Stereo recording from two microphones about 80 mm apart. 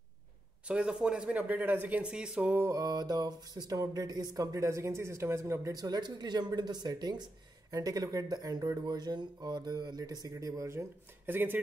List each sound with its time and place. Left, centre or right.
0.7 s speech: centre
2.6 s a sound: right
5.7 s speech: right
7.7 s a sound: right
8.8 s speech: right
11.2 s speech: right